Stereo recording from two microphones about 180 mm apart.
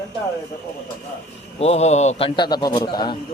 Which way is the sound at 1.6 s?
35° left (ahead or behind).